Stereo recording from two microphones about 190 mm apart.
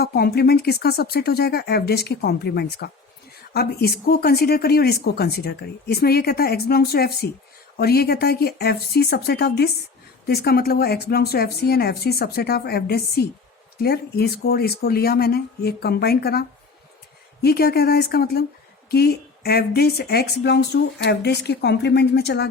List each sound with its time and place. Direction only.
0.0 s speech: 55° left (ahead or behind)